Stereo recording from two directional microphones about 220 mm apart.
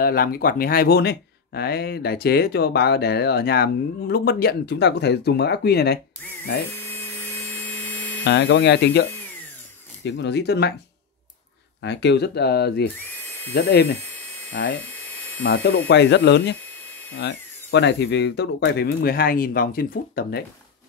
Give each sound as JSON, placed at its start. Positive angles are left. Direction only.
{"t": 0.0, "sound": "speech", "side_deg": 40}
{"t": 6.7, "sound": "a sound", "side_deg": 10}
{"t": 8.2, "sound": "speech", "side_deg": 55}
{"t": 10.0, "sound": "speech", "side_deg": 50}
{"t": 11.8, "sound": "speech", "side_deg": 50}
{"t": 14.8, "sound": "a sound", "side_deg": 10}
{"t": 15.4, "sound": "speech", "side_deg": 50}